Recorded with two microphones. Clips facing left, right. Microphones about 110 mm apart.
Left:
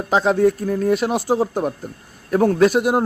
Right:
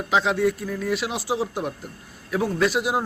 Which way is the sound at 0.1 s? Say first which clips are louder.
Left 5 dB; 40° left (ahead or behind).